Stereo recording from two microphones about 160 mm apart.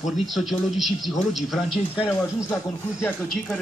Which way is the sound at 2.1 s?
15° left (ahead or behind).